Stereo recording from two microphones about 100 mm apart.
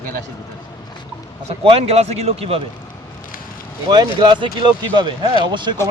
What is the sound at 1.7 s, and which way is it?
Speech, 85° right.